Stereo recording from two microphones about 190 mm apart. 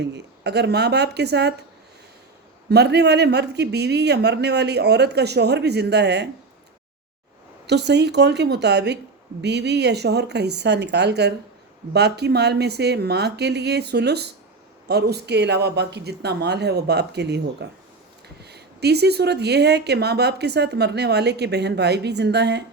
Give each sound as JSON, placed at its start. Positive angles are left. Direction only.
{"t": 0.0, "sound": "speech", "side_deg": -65}
{"t": 2.6, "sound": "speech", "side_deg": -60}
{"t": 7.7, "sound": "speech", "side_deg": -65}